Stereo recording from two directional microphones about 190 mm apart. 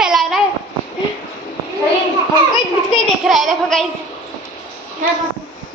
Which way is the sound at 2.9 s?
Centre (ahead or behind).